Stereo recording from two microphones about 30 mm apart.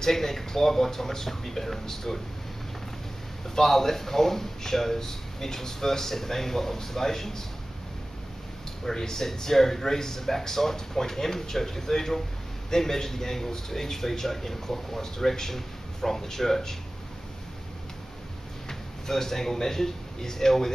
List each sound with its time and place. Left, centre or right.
0.0 s a man's voice: centre
3.4 s a man's voice: centre
8.9 s speech: left
9.2 s a man's voice: centre
18.7 s speech: centre